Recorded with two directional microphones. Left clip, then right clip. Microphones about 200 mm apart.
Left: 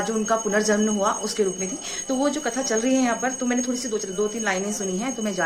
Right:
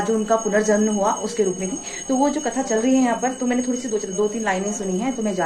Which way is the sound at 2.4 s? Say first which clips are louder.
Right 2 dB; 10° left (ahead or behind).